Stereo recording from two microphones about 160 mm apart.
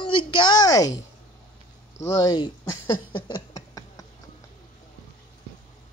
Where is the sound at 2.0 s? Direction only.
20° left (ahead or behind).